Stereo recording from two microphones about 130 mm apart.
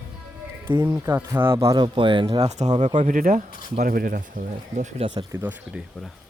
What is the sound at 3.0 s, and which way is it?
Speech, 90° right.